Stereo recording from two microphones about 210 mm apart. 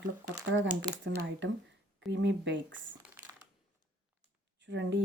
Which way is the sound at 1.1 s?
60° right (ahead or behind).